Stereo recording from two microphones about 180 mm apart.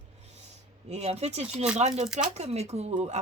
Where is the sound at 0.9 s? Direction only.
35° right (ahead or behind).